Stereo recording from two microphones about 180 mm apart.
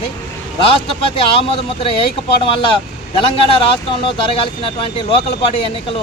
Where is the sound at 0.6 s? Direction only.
30° left (ahead or behind).